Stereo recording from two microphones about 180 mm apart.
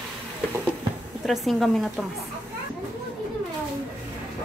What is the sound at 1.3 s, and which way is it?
Speech, centre (ahead or behind).